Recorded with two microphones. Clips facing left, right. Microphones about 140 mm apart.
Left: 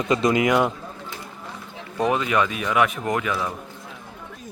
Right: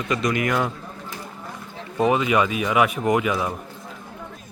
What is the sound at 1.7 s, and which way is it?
Speech, 5° right (ahead or behind).